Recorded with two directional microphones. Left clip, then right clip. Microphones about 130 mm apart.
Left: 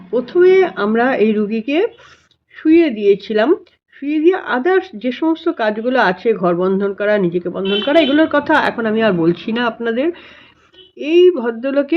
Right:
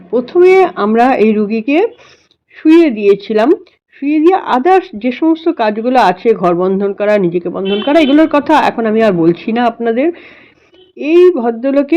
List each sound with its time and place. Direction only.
0.1 s a woman's voice: 25° right (ahead or behind)